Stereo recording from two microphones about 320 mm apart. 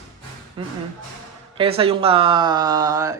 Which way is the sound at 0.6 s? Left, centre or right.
Centre.